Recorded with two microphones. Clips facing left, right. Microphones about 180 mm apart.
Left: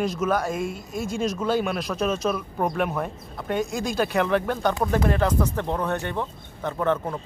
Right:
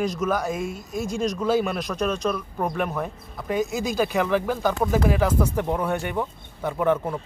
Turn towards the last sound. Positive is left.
turn(degrees=-10)  # may be behind; listen again after turning